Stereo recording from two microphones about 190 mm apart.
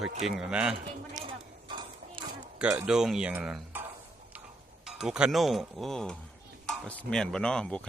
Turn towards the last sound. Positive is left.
turn(degrees=5)  # may be behind; listen again after turning